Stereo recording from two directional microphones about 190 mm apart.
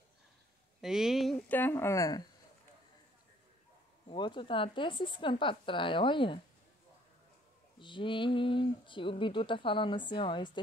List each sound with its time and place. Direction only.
0.7 s speech: centre (ahead or behind)
1.5 s speech: 10° left (ahead or behind)
4.1 s speech: 25° left (ahead or behind)
7.8 s speech: 25° left (ahead or behind)